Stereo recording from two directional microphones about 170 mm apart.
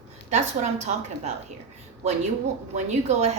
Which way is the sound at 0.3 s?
40° right (ahead or behind).